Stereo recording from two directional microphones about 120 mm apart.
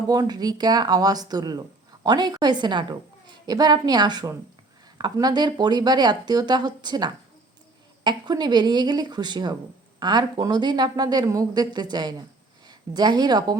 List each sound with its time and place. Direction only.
0.1 s a woman's voice: 35° right (ahead or behind)